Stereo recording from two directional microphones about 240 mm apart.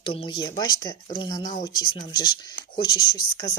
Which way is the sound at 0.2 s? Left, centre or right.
Centre.